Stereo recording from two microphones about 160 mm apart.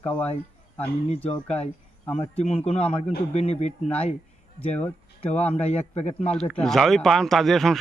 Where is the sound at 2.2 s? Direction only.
40° left (ahead or behind).